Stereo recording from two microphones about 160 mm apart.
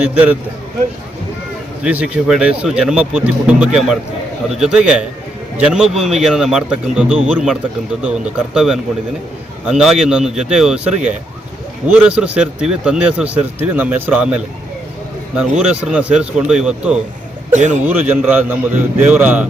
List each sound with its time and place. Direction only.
0.0 s a man's voice: 10° right (ahead or behind)
1.8 s a man's voice: 5° right (ahead or behind)
11.9 s a man's voice: 10° right (ahead or behind)
17.5 s speech: 50° right (ahead or behind)
17.8 s a man's voice: 10° right (ahead or behind)